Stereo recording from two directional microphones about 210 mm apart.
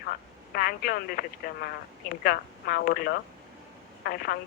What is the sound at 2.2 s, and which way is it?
Speech, 45° left (ahead or behind).